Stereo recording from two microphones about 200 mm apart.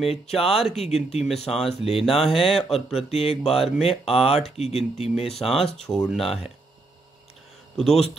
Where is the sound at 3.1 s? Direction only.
30° left (ahead or behind).